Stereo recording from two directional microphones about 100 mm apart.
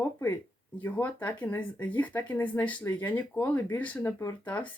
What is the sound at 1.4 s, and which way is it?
Speech, 15° left (ahead or behind).